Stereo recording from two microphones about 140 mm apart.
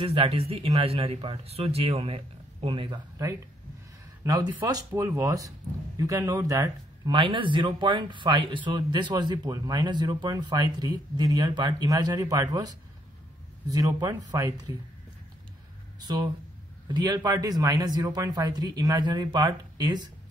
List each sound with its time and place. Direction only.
0.0 s a man's voice: 40° right (ahead or behind)
3.2 s a man's voice: 25° right (ahead or behind)
16.0 s a man's voice: 30° right (ahead or behind)